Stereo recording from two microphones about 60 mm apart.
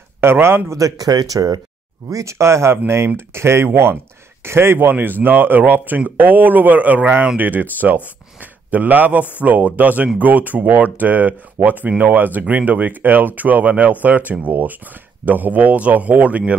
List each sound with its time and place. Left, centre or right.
0.2 s a man's voice: right
0.7 s speech: right
2.0 s speech: right